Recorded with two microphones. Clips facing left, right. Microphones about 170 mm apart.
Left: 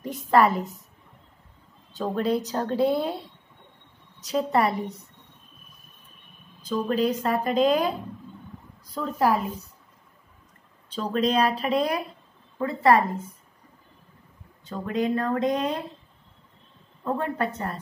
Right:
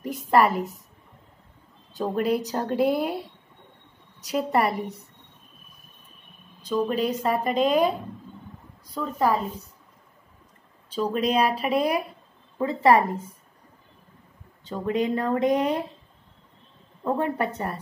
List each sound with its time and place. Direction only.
0.0 s a woman's voice: 5° right (ahead or behind)
2.0 s speech: 10° right (ahead or behind)
6.7 s a woman's voice: 5° right (ahead or behind)
8.9 s a woman's voice: 5° left (ahead or behind)
10.9 s speech: 5° right (ahead or behind)
12.5 s a woman's voice: 15° right (ahead or behind)
14.7 s speech: 15° right (ahead or behind)
17.0 s speech: 15° right (ahead or behind)